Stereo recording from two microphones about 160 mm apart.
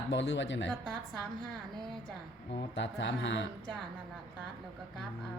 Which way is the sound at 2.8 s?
90° left.